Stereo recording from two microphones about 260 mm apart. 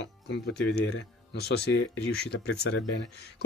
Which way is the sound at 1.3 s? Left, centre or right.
Left.